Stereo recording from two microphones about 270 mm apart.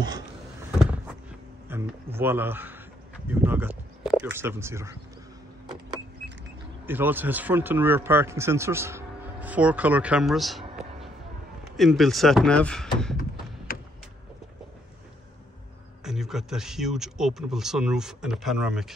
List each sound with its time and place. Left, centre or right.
1.7 s a man's voice: centre
6.9 s speech: centre
11.6 s speech: centre
13.7 s a sound: left
16.0 s speech: centre